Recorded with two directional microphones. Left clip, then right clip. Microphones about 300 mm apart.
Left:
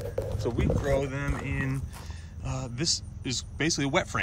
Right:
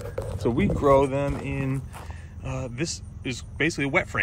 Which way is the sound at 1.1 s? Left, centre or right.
Centre.